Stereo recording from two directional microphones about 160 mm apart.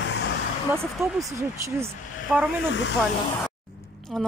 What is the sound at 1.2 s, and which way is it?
Speech, 20° right (ahead or behind).